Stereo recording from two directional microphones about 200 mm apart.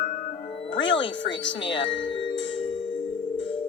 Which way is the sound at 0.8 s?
65° left (ahead or behind).